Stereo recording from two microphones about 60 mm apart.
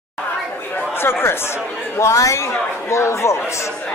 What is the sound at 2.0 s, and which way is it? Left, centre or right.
Speech, left.